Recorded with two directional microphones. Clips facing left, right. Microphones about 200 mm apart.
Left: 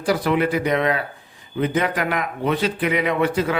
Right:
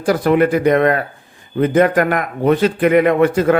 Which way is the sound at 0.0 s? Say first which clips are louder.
Right 6 dB; 50° right (ahead or behind).